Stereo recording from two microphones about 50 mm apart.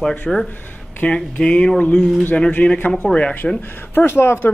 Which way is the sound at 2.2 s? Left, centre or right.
Left.